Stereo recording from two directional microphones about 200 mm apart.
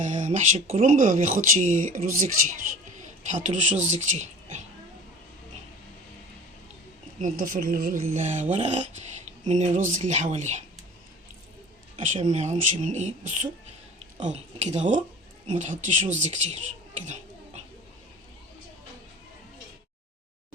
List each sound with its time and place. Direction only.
0.0 s speech: 40° right (ahead or behind)
7.2 s speech: 40° right (ahead or behind)
11.9 s speech: 40° right (ahead or behind)